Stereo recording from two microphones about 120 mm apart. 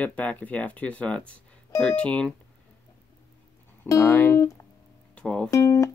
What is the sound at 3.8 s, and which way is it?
Speech, 25° left (ahead or behind).